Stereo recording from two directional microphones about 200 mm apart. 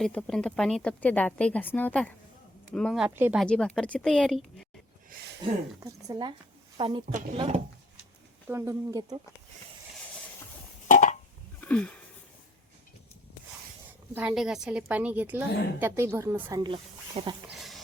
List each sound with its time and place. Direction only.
0.0 s speech: 5° left (ahead or behind)
3.4 s speech: 5° left (ahead or behind)
5.4 s a woman's voice: 20° right (ahead or behind)
8.4 s a woman's voice: 15° right (ahead or behind)
10.8 s a sound: 40° left (ahead or behind)
11.6 s sniff: 5° left (ahead or behind)
14.2 s a woman's voice: 5° right (ahead or behind); by 17.3 s 25° right (ahead or behind)
17.5 s a sound: centre (ahead or behind)